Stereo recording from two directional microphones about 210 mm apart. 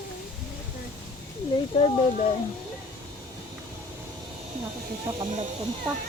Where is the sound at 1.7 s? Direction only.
30° left (ahead or behind).